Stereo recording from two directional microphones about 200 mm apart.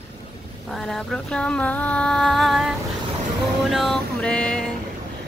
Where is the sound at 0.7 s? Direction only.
Centre (ahead or behind).